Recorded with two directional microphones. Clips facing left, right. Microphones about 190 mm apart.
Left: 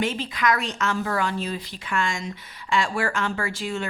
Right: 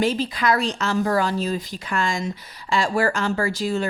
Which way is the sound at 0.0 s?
35° right (ahead or behind).